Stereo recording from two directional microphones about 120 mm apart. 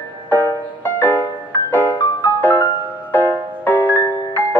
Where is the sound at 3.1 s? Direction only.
15° left (ahead or behind).